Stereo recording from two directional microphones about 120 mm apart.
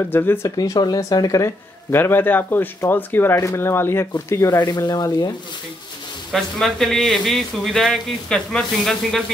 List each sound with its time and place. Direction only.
0.1 s speech: 20° left (ahead or behind)
0.6 s speech: 35° left (ahead or behind)
4.6 s speech: 35° left (ahead or behind)
6.3 s speech: centre (ahead or behind)